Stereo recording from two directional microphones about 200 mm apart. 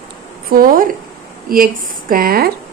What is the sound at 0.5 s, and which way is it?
A woman's voice, 45° right (ahead or behind).